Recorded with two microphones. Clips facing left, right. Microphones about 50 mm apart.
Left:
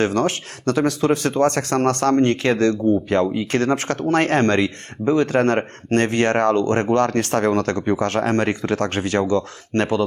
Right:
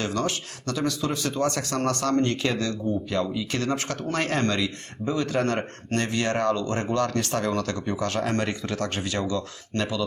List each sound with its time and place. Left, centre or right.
0.0 s speech: left